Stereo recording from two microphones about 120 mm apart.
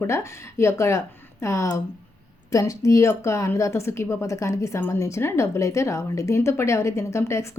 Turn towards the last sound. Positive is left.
turn(degrees=25)  # may be behind; listen again after turning